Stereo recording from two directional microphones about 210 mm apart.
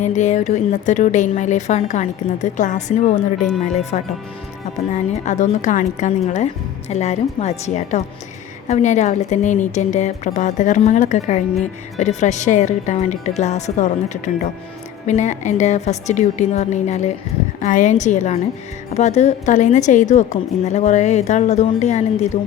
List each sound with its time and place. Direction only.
0.0 s a woman's voice: 35° left (ahead or behind)